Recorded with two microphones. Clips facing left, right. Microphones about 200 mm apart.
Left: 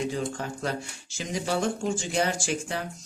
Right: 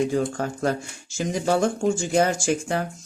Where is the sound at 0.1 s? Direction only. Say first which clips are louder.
Right 6 dB; 45° right (ahead or behind).